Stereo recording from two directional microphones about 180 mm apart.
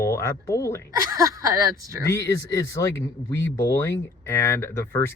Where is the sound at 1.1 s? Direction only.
20° right (ahead or behind).